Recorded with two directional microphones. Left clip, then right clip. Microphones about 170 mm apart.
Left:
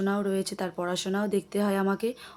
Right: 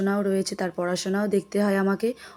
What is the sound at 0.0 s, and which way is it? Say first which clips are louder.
Speech: right 4 dB; 15° right (ahead or behind).